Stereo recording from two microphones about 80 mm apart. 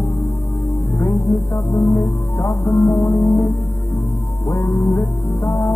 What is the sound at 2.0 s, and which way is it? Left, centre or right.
Music, left.